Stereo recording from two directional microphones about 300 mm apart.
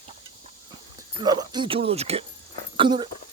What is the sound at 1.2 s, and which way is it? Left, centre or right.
Speech, centre.